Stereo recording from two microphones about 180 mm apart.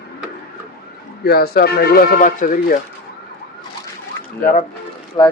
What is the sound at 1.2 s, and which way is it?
Speech, 60° left (ahead or behind).